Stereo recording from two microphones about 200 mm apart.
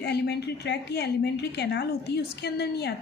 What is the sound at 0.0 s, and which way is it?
A woman's voice, 55° left (ahead or behind).